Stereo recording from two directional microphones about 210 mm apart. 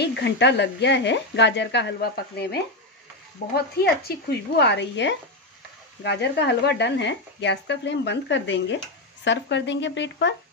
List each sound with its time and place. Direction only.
0.0 s speech: 55° left (ahead or behind)